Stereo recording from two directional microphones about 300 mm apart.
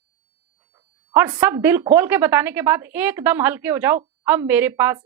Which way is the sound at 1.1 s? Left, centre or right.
Centre.